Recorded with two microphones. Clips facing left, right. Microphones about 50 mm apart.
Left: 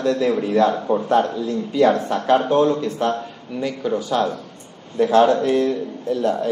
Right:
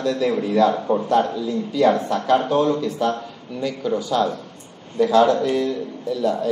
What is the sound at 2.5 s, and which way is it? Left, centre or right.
Speech, left.